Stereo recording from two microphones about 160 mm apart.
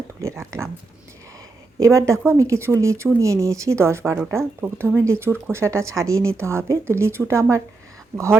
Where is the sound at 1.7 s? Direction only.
20° right (ahead or behind).